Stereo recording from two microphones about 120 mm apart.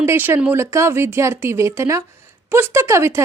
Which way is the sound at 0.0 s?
20° right (ahead or behind).